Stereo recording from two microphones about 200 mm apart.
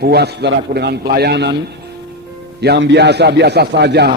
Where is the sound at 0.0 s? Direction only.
55° right (ahead or behind).